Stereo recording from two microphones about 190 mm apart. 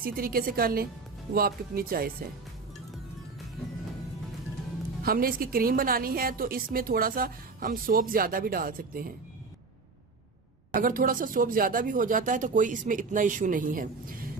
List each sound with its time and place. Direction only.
0.0 s a woman's voice: 50° right (ahead or behind)
5.0 s a woman's voice: 50° right (ahead or behind)
10.8 s a woman's voice: 45° right (ahead or behind)